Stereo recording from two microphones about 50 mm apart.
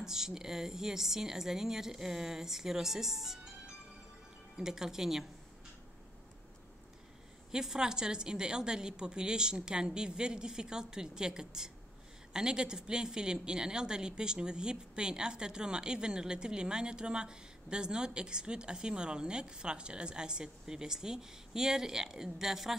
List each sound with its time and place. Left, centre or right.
0.0 s speech: centre
4.6 s speech: centre
7.5 s speech: centre